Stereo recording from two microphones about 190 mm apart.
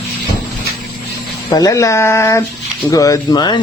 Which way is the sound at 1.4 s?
20° left (ahead or behind).